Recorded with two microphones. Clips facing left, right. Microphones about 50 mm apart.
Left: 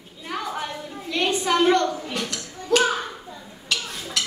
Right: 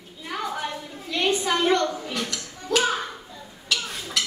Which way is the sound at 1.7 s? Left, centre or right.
Centre.